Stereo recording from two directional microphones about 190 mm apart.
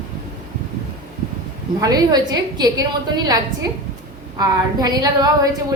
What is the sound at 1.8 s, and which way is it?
A woman's voice, 20° right (ahead or behind).